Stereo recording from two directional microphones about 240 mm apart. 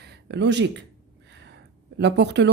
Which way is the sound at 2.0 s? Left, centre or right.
Right.